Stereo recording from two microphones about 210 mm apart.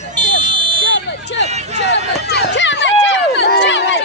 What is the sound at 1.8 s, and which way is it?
Run, 55° left (ahead or behind).